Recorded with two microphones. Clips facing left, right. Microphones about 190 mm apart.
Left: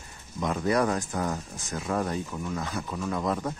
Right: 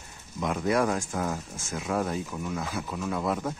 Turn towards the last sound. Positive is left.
turn(degrees=-5)  # may be behind; listen again after turning